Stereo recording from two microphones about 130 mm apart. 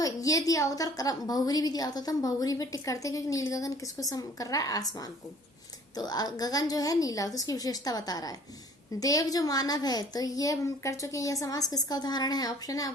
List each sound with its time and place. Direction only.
0.0 s a child's voice: 25° left (ahead or behind)